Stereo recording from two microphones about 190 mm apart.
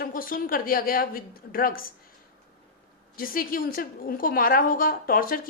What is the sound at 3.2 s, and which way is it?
A woman's voice, 50° left (ahead or behind).